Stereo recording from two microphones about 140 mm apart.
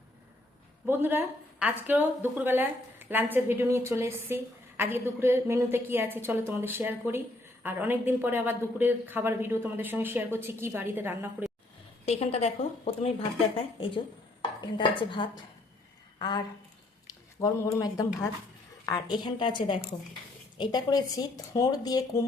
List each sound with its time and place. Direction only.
0.9 s a woman's voice: 15° right (ahead or behind)
12.0 s a woman's voice: 50° left (ahead or behind)
14.8 s a woman's voice: 35° left (ahead or behind)
17.4 s a woman's voice: 20° left (ahead or behind)